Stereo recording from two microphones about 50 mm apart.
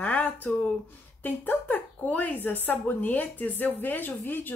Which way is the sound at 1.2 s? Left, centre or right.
Left.